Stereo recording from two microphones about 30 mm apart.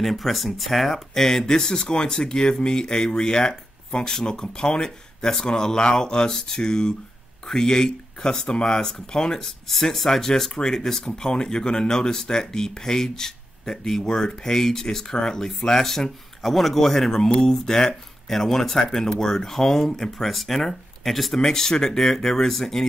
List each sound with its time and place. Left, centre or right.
0.0 s speech: centre
9.7 s speech: centre
15.9 s speech: centre
18.3 s speech: centre
21.4 s speech: centre